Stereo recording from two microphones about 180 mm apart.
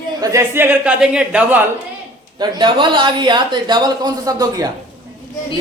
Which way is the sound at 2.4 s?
25° right (ahead or behind).